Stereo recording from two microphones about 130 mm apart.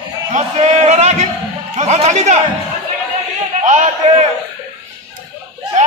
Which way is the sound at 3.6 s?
65° right (ahead or behind).